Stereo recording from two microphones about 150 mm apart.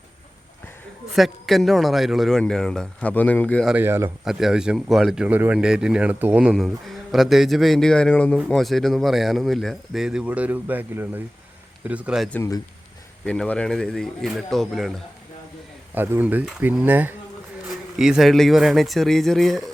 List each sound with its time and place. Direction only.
1.1 s speech: centre (ahead or behind)
3.7 s speech: 15° right (ahead or behind)
4.3 s speech: 5° right (ahead or behind)
13.2 s speech: 5° left (ahead or behind)
16.0 s speech: 15° right (ahead or behind)